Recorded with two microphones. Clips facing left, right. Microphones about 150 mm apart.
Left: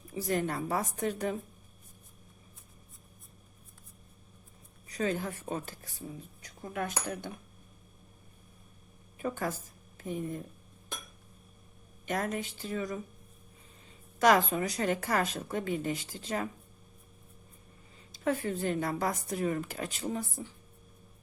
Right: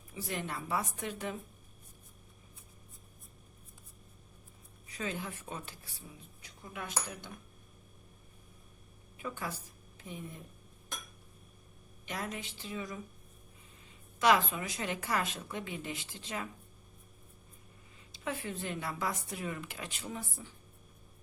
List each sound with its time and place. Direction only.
0.1 s speech: 40° left (ahead or behind)
4.9 s speech: 40° left (ahead or behind)
9.1 s speech: 45° left (ahead or behind)
12.0 s speech: 45° left (ahead or behind)
14.2 s speech: 45° left (ahead or behind)
18.1 s speech: 40° left (ahead or behind)